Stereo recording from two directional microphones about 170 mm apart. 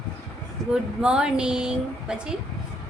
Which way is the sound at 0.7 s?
5° right (ahead or behind).